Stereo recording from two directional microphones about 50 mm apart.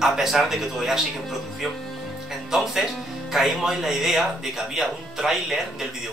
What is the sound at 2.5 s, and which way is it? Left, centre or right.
Speech, centre.